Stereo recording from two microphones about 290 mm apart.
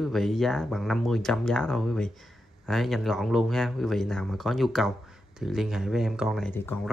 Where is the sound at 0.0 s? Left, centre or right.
Centre.